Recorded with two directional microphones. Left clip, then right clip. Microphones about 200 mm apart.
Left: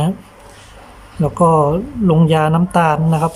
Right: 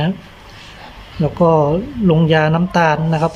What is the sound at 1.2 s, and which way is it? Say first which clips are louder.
Speech: left 1 dB; 15° left (ahead or behind).